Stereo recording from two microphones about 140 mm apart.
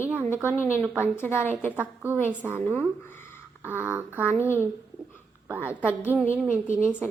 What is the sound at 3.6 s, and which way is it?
A woman's voice, 15° right (ahead or behind).